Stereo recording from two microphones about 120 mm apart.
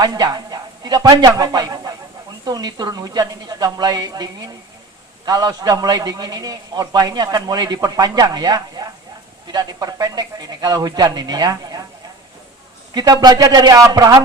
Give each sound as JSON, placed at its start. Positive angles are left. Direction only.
{"t": 0.0, "sound": "a man's voice", "side_deg": -30}
{"t": 12.9, "sound": "a man's voice", "side_deg": -35}